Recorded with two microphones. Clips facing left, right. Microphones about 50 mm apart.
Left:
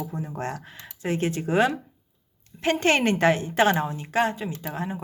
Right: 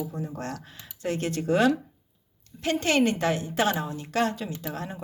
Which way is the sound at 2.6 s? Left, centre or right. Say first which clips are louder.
Left 2 dB; left.